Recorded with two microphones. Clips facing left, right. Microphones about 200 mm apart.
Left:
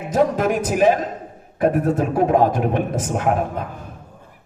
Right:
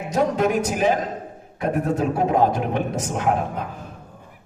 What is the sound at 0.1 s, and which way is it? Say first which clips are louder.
A man's voice: left 2 dB; 50° left (ahead or behind).